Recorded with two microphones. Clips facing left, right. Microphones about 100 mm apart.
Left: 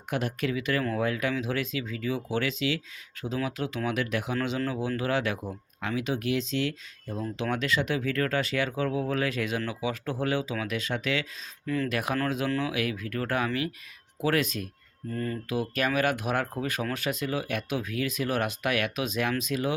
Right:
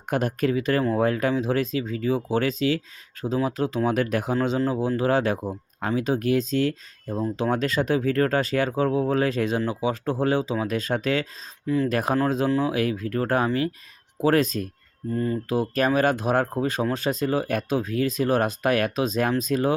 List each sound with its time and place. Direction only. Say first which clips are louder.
0.1 s speech: right 6 dB; 45° right (ahead or behind)
11.6 s speech: right 6 dB; 20° right (ahead or behind)
11.9 s speech: right 6 dB; 40° right (ahead or behind)
15.1 s speech: right 6 dB; 20° right (ahead or behind)
15.4 s speech: right 5 dB; 35° right (ahead or behind)